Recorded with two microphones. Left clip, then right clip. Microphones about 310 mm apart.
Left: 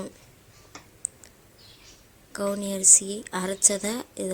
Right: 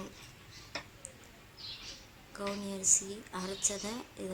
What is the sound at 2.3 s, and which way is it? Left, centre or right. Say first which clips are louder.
A woman's voice: left 10 dB; centre.